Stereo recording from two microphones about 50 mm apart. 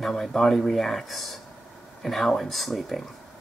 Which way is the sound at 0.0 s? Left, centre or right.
Centre.